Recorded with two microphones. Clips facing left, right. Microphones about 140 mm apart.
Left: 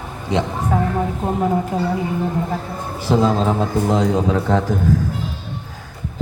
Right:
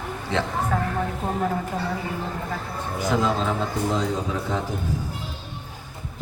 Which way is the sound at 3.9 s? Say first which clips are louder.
Left 8 dB; 65° left (ahead or behind).